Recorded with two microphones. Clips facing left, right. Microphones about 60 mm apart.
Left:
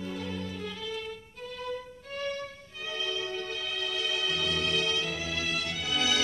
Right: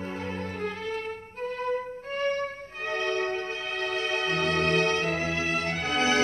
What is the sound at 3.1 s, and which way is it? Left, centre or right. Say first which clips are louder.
Music: right 5 dB; right.